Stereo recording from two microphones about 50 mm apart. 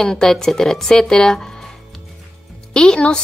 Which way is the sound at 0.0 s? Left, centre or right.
Centre.